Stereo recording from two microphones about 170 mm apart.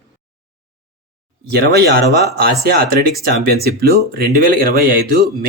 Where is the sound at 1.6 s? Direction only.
70° right (ahead or behind).